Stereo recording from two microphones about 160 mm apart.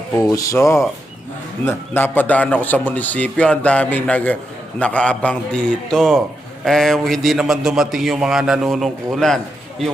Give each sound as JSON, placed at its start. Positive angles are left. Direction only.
{"t": 0.2, "sound": "a man's voice", "side_deg": 20}